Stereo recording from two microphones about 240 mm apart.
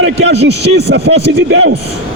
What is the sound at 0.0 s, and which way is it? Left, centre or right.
Speech, right.